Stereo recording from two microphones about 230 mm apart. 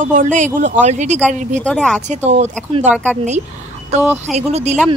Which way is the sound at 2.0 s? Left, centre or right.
Right.